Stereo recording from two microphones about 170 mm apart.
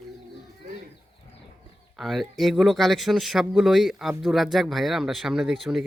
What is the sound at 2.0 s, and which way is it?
Speech, centre (ahead or behind).